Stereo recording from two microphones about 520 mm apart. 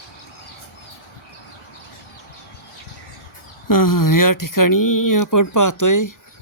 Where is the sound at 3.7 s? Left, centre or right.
Left.